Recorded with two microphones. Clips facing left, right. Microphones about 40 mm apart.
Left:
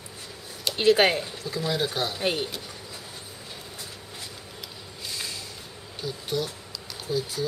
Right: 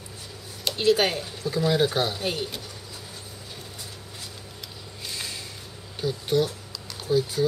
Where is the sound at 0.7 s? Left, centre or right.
Left.